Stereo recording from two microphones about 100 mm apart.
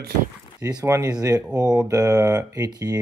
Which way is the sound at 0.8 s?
30° right (ahead or behind).